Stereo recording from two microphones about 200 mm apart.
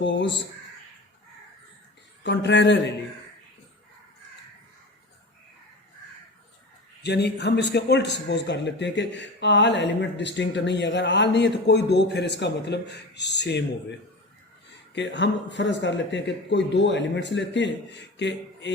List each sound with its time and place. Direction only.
0.0 s a man's voice: 60° left (ahead or behind)
2.2 s a man's voice: 60° left (ahead or behind)
7.0 s a man's voice: 55° left (ahead or behind)
14.9 s a man's voice: 60° left (ahead or behind)